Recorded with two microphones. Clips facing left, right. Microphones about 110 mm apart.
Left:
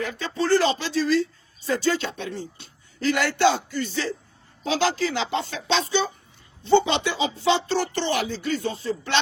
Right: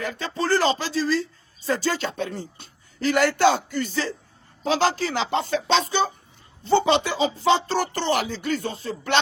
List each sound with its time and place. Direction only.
0.0 s speech: 45° right (ahead or behind)